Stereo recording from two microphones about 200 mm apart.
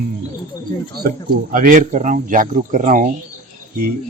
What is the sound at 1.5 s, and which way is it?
Speech, 45° right (ahead or behind).